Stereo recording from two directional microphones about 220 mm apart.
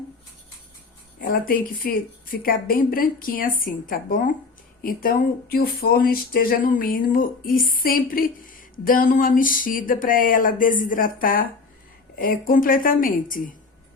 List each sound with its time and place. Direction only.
1.2 s speech: 40° left (ahead or behind)